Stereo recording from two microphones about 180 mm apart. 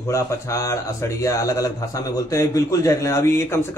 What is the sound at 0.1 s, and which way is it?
A man's voice, 15° left (ahead or behind).